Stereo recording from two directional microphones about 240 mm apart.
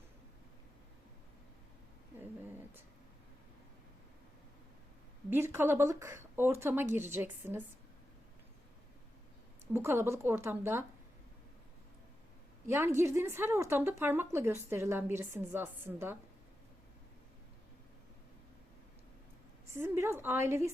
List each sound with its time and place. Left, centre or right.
5.3 s a woman's voice: centre
9.7 s a woman's voice: centre
12.6 s a woman's voice: centre
19.7 s a woman's voice: centre